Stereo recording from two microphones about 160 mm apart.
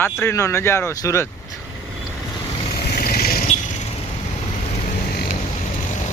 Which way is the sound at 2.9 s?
65° left (ahead or behind).